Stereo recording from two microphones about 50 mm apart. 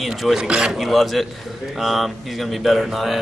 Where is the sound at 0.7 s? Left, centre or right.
Centre.